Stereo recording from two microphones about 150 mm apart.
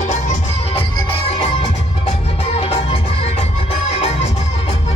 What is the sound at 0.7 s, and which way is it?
Music, 40° left (ahead or behind).